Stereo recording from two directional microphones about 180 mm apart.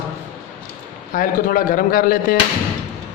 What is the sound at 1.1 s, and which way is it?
Speech, 50° left (ahead or behind).